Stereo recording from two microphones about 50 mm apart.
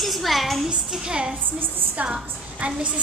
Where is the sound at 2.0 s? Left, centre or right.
Right.